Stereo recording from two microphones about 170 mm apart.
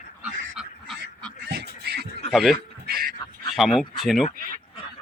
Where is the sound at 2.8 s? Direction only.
65° right (ahead or behind).